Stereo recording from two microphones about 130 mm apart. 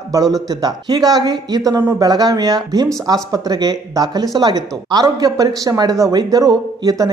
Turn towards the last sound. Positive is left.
turn(degrees=-30)  # may be behind; listen again after turning